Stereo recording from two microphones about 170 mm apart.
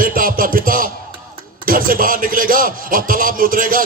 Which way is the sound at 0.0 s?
55° right (ahead or behind).